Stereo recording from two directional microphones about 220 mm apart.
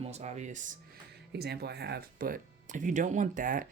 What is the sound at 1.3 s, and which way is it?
Speech, 45° right (ahead or behind).